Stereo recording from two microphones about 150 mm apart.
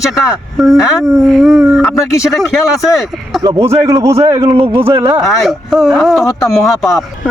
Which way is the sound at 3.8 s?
20° right (ahead or behind).